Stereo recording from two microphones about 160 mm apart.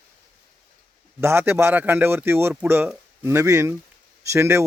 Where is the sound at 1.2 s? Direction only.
15° right (ahead or behind).